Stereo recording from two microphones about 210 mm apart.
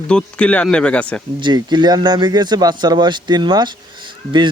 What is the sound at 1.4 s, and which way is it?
Speech, 20° right (ahead or behind).